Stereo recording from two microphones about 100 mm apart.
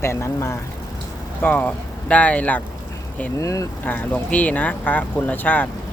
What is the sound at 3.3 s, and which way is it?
Speech, 35° left (ahead or behind).